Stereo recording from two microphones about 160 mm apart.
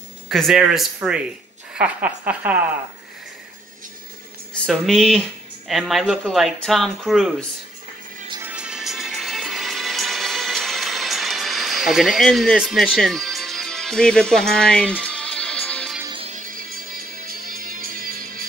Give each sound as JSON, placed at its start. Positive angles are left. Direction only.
{"t": 0.3, "sound": "speech", "side_deg": 0}
{"t": 4.6, "sound": "speech", "side_deg": 0}
{"t": 8.4, "sound": "music", "side_deg": -10}
{"t": 16.3, "sound": "music", "side_deg": -55}